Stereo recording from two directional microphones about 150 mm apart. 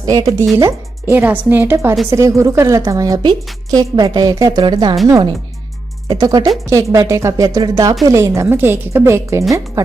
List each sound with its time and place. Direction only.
0.0 s a woman's voice: 25° right (ahead or behind)
6.0 s a woman's voice: 25° right (ahead or behind)